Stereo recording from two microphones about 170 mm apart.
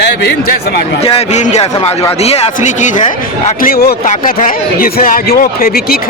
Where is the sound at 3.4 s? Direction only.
55° left (ahead or behind).